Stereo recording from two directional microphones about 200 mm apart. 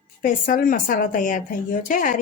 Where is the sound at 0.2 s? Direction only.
40° left (ahead or behind).